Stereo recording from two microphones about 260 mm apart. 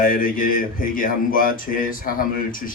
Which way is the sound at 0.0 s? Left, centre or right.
Left.